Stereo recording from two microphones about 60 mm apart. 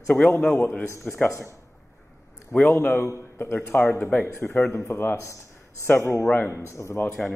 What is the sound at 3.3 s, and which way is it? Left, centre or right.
Speech, left.